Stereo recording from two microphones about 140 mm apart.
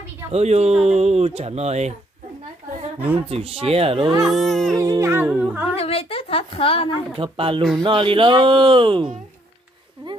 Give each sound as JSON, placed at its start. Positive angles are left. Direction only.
{"t": 0.3, "sound": "speech", "side_deg": -50}
{"t": 3.3, "sound": "speech", "side_deg": -45}
{"t": 4.3, "sound": "a sound", "side_deg": 0}
{"t": 4.7, "sound": "speech", "side_deg": -25}
{"t": 5.8, "sound": "a woman's voice", "side_deg": 45}
{"t": 7.2, "sound": "speech", "side_deg": -40}